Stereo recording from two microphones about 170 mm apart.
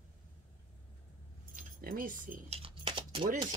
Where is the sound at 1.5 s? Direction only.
55° right (ahead or behind).